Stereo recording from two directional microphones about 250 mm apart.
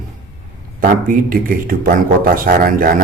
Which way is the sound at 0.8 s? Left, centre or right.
Right.